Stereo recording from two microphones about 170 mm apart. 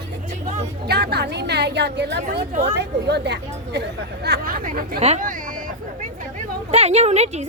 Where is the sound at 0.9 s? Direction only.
75° right (ahead or behind).